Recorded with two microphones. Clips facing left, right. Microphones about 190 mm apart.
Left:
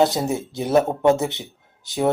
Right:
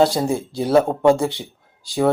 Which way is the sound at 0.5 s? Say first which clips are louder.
Right 2 dB; 20° left (ahead or behind).